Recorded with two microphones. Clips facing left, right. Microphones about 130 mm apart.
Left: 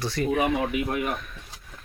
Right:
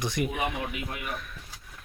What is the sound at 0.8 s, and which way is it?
Speech, 50° left (ahead or behind).